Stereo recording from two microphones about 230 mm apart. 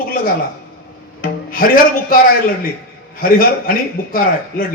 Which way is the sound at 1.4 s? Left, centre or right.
Left.